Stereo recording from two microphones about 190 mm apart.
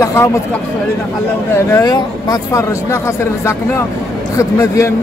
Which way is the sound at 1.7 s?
20° left (ahead or behind).